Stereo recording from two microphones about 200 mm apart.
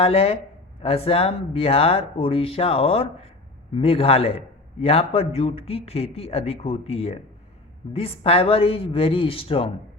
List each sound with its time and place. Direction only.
0.0 s a man's voice: 30° left (ahead or behind)